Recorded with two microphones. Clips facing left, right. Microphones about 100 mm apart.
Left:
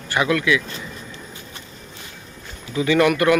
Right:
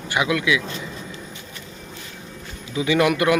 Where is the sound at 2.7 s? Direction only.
15° right (ahead or behind).